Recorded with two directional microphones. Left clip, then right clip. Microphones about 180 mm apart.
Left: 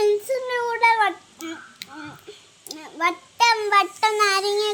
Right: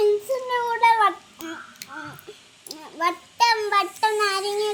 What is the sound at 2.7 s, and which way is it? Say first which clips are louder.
Child singing: left 1 dB; 15° left (ahead or behind).